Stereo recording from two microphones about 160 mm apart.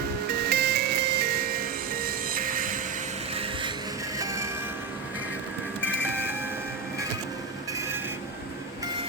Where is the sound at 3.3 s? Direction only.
35° right (ahead or behind).